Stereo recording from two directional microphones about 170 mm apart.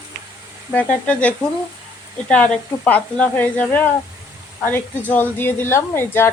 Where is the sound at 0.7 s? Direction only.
5° left (ahead or behind).